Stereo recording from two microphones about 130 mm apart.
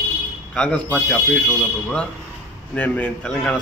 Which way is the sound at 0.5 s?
10° left (ahead or behind).